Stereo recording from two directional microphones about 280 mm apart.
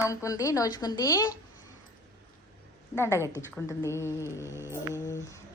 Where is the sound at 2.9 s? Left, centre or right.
Centre.